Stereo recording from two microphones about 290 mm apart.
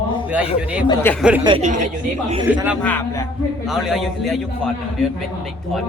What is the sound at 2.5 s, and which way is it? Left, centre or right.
Speech, centre.